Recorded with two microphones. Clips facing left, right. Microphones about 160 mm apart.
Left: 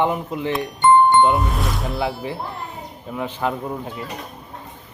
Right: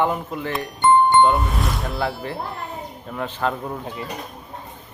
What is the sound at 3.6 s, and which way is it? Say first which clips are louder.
Speech: left 1 dB; centre (ahead or behind).